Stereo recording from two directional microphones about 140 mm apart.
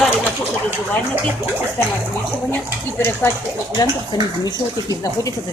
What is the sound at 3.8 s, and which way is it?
Speech, 30° left (ahead or behind).